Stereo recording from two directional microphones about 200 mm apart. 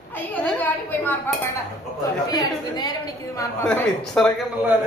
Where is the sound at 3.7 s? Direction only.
5° left (ahead or behind).